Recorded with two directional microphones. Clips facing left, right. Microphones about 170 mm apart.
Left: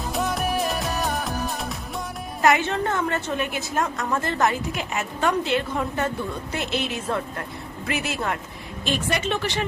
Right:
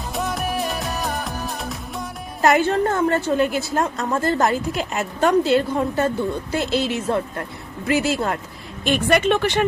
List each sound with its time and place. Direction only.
0.1 s music: centre (ahead or behind)
2.4 s a woman's voice: 35° right (ahead or behind)
8.8 s speech: 60° right (ahead or behind)